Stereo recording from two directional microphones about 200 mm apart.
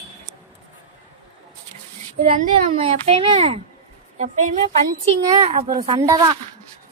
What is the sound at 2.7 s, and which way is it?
Speech, 30° right (ahead or behind).